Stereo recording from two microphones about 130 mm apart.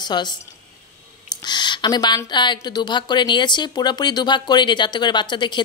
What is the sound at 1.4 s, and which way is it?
Speech, 35° left (ahead or behind).